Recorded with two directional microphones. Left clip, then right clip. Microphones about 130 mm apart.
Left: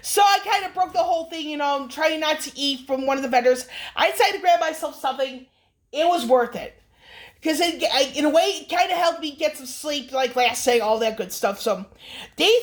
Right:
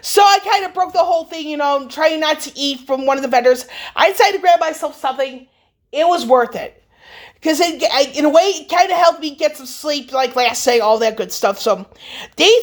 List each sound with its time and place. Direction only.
0.0 s speech: 40° right (ahead or behind)